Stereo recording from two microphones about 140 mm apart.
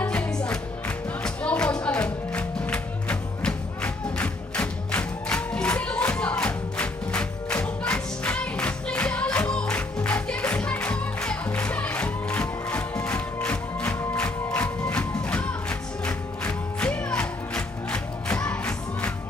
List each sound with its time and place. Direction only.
0.0 s music: 10° left (ahead or behind)